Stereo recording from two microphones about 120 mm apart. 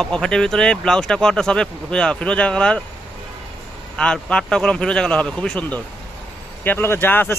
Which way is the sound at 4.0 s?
5° left (ahead or behind).